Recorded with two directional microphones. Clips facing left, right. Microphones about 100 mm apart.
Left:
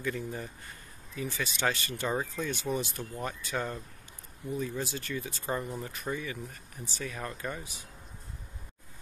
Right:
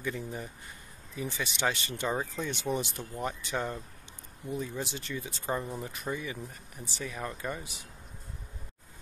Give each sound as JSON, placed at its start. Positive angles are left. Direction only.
{"t": 0.0, "sound": "speech", "side_deg": -15}